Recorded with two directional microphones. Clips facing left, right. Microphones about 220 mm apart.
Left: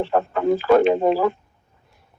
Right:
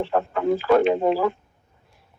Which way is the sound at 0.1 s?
45° left (ahead or behind).